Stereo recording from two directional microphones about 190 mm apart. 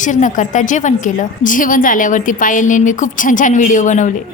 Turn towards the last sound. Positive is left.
turn(degrees=40)  # may be behind; listen again after turning